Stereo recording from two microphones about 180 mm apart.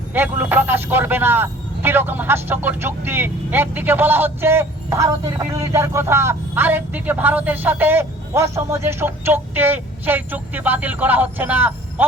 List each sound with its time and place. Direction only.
0.1 s speech: 10° right (ahead or behind)